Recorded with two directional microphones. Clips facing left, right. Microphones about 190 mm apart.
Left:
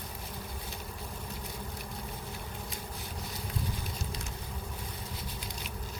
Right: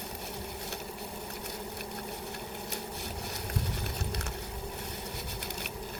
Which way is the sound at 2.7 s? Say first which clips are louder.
Right 4 dB; 70° right (ahead or behind).